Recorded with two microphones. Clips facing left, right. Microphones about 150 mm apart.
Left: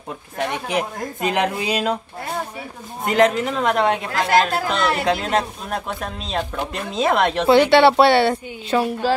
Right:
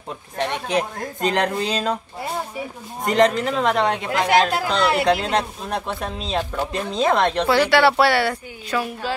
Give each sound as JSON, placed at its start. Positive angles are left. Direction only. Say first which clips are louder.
{"t": 0.4, "sound": "speech", "louder": "even", "side_deg": 10}
{"t": 3.0, "sound": "speech", "louder": "left 1 dB", "side_deg": 5}
{"t": 4.3, "sound": "speech", "louder": "left 1 dB", "side_deg": -10}
{"t": 5.0, "sound": "speech", "louder": "right 1 dB", "side_deg": 0}
{"t": 7.4, "sound": "speech", "louder": "left 6 dB", "side_deg": 25}
{"t": 9.0, "sound": "speech", "louder": "left 7 dB", "side_deg": 35}